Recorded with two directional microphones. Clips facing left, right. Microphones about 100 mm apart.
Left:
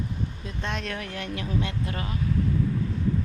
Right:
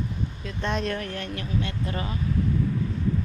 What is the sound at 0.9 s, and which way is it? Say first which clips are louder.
Speech: right 1 dB; 10° left (ahead or behind).